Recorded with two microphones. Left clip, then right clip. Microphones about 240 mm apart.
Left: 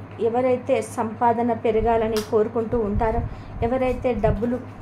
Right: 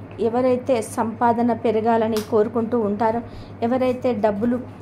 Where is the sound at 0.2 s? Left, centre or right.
Right.